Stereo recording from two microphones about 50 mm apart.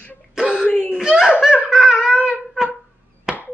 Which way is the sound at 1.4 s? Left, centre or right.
Centre.